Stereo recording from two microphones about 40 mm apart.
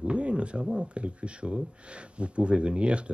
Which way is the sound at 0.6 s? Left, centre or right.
Centre.